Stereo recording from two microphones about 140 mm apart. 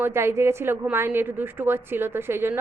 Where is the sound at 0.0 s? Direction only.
20° right (ahead or behind).